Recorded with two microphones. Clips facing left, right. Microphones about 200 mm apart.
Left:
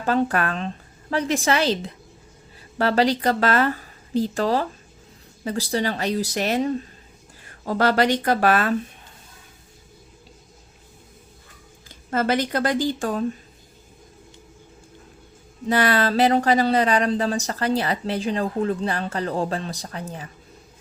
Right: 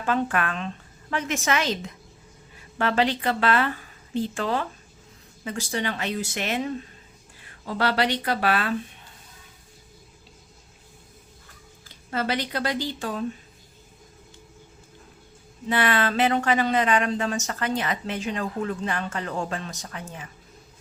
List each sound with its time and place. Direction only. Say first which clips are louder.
0.0 s a woman's voice: left 3 dB; 35° left (ahead or behind)
12.1 s speech: left 5 dB; 45° left (ahead or behind)
15.6 s speech: left 3 dB; 40° left (ahead or behind)